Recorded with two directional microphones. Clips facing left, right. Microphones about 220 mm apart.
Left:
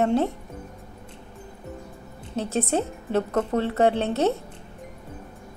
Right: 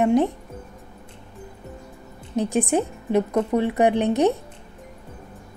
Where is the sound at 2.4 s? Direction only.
15° right (ahead or behind).